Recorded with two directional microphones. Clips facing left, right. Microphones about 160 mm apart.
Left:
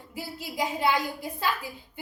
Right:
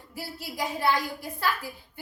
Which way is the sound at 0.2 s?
15° left (ahead or behind).